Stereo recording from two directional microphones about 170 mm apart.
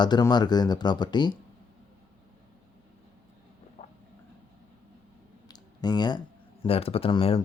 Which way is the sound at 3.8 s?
40° left (ahead or behind).